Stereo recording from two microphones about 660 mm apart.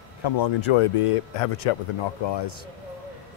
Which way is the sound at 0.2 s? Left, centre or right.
Left.